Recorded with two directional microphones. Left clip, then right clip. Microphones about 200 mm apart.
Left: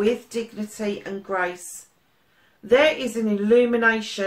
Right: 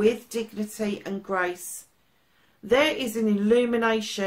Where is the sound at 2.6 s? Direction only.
45° right (ahead or behind).